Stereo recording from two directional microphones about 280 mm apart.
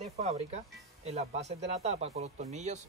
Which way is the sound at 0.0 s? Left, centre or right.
Right.